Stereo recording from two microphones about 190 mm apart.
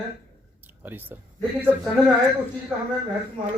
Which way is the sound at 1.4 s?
5° left (ahead or behind).